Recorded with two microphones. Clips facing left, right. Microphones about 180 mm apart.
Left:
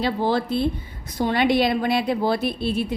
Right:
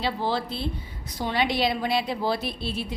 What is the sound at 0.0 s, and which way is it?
A woman's voice, 50° left (ahead or behind).